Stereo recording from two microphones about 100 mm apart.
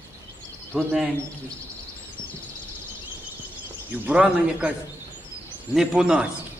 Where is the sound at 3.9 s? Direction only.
10° right (ahead or behind).